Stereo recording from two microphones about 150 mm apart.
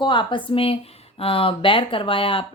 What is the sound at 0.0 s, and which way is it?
A woman's voice, 30° left (ahead or behind).